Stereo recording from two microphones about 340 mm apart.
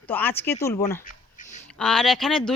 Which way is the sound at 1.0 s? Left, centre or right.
Left.